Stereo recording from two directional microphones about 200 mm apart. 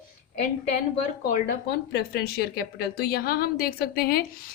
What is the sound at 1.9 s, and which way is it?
Speech, 55° left (ahead or behind).